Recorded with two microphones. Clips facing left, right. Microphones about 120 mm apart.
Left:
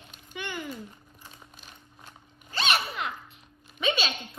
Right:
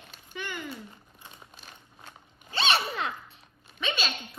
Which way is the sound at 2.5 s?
30° right (ahead or behind).